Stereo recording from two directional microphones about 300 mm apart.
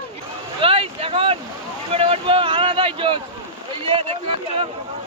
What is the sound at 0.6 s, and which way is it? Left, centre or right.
Speech, centre.